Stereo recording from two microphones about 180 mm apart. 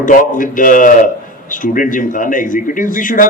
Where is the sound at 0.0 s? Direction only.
45° left (ahead or behind).